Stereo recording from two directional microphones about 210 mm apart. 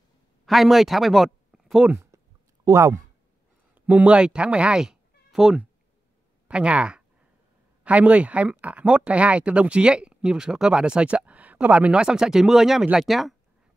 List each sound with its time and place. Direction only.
0.5 s speech: centre (ahead or behind)
2.6 s speech: 15° right (ahead or behind)